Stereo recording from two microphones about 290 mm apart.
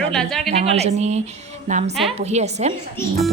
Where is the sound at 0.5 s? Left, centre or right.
Right.